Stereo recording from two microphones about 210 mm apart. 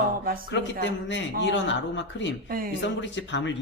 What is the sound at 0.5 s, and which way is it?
Speech, 60° left (ahead or behind).